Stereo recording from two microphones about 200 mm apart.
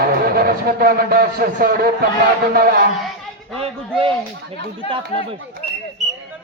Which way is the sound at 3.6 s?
30° right (ahead or behind).